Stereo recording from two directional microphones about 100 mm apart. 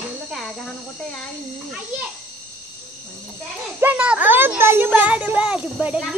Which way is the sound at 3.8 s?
15° right (ahead or behind).